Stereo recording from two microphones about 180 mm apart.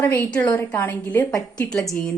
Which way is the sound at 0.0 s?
10° left (ahead or behind).